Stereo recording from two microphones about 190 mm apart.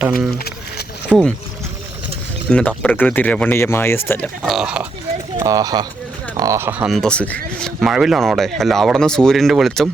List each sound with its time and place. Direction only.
0.3 s a sound: 55° left (ahead or behind)
1.1 s rowboat: centre (ahead or behind)
2.5 s speech: 5° left (ahead or behind)
4.4 s speech: 5° right (ahead or behind)
5.4 s speech: 20° right (ahead or behind); by 9.9 s centre (ahead or behind)